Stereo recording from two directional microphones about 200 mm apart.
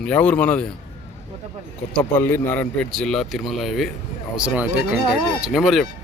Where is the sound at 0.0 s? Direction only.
5° left (ahead or behind).